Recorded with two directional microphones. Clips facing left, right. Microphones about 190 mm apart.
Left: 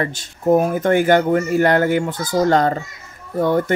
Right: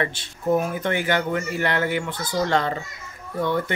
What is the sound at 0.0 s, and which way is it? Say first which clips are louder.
Speech: left 5 dB; 40° left (ahead or behind).